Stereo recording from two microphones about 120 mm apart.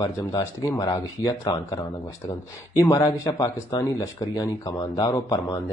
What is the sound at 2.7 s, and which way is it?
Speech, 25° left (ahead or behind).